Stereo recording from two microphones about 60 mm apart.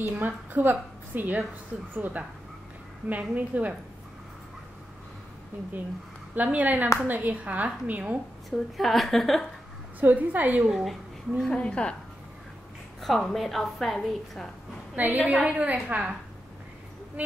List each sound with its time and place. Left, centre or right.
0.1 s a woman's voice: right
6.3 s a woman's voice: right
8.5 s a woman's voice: centre
9.9 s a woman's voice: right
10.7 s speech: centre
11.5 s speech: centre
13.0 s a woman's voice: centre
15.0 s a woman's voice: right